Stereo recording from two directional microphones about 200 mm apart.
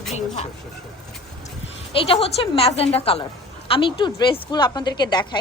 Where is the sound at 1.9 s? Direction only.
25° left (ahead or behind).